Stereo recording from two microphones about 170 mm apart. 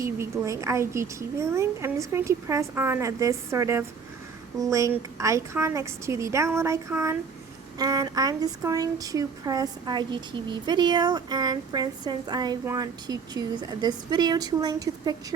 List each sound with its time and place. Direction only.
0.0 s a woman's voice: 15° right (ahead or behind)